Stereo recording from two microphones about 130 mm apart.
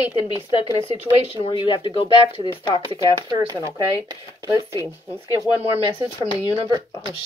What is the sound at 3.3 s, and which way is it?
Speech, 25° right (ahead or behind).